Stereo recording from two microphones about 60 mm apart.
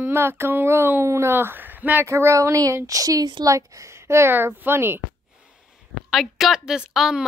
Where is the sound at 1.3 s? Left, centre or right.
Right.